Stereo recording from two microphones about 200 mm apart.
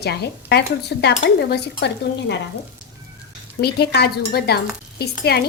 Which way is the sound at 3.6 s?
55° left (ahead or behind).